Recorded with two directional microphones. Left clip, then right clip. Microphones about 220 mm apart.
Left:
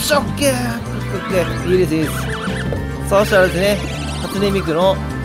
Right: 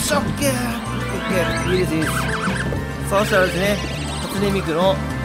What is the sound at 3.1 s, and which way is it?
Speech, 15° left (ahead or behind).